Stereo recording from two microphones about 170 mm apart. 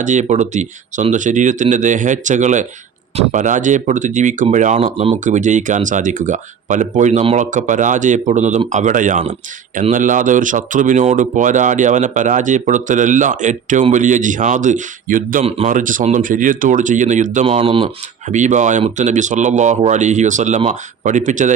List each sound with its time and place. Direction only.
0.0 s speech: 45° right (ahead or behind)
15.4 s speech: 35° right (ahead or behind)
15.7 s speech: 50° right (ahead or behind)
17.4 s speech: 35° right (ahead or behind)